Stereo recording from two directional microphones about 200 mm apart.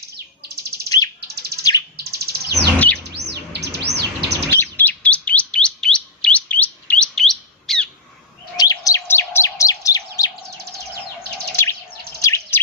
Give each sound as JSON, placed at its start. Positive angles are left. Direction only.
{"t": 0.4, "sound": "bird", "side_deg": -55}
{"t": 0.9, "sound": "bird", "side_deg": 20}
{"t": 2.0, "sound": "chirp", "side_deg": -55}
{"t": 2.7, "sound": "chirp", "side_deg": 10}
{"t": 3.0, "sound": "chirp", "side_deg": -55}
{"t": 4.5, "sound": "chirp", "side_deg": 10}
{"t": 8.5, "sound": "chirp", "side_deg": 15}
{"t": 11.6, "sound": "bird vocalization", "side_deg": 15}